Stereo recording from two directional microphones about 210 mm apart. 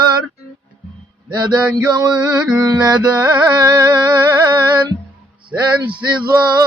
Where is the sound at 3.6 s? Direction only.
20° right (ahead or behind).